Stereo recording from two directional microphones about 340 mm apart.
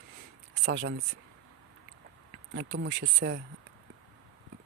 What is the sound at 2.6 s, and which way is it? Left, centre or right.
Speech, right.